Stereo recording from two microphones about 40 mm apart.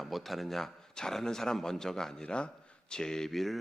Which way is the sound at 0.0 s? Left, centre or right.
Centre.